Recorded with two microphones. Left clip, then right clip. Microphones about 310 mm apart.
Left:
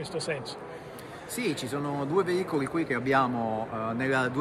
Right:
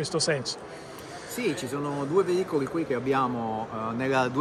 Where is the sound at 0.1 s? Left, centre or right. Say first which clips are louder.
Right 6 dB; right.